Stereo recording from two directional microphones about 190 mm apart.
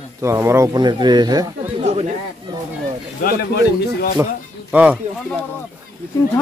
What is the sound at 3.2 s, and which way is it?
Speech, 55° left (ahead or behind).